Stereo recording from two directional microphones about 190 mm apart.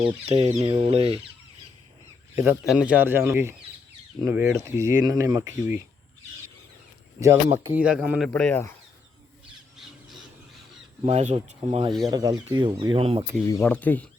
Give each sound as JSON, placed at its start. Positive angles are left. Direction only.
{"t": 0.0, "sound": "speech", "side_deg": -30}
{"t": 2.3, "sound": "speech", "side_deg": -15}
{"t": 7.2, "sound": "speech", "side_deg": -15}
{"t": 8.3, "sound": "speech", "side_deg": 10}
{"t": 11.0, "sound": "speech", "side_deg": -40}
{"t": 12.0, "sound": "speech", "side_deg": -20}
{"t": 13.5, "sound": "speech", "side_deg": 10}